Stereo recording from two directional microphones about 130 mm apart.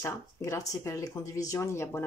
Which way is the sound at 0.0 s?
25° left (ahead or behind).